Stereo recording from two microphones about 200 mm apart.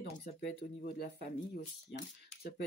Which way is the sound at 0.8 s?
50° left (ahead or behind).